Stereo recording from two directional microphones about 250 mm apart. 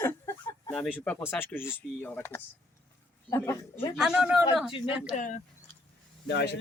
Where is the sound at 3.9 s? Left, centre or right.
Centre.